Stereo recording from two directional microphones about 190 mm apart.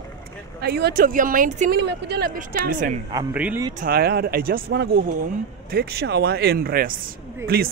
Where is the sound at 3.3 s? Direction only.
10° right (ahead or behind).